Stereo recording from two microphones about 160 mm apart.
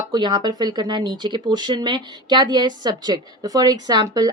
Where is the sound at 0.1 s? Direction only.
25° right (ahead or behind).